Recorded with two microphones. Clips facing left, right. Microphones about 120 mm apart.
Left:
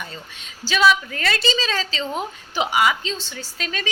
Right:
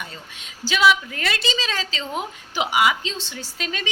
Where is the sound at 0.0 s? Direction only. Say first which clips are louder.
Left 1 dB; 15° right (ahead or behind).